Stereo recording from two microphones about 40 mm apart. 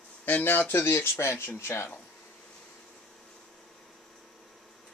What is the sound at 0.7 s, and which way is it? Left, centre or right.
Speech, left.